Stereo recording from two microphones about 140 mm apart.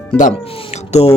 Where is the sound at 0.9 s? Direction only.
50° left (ahead or behind).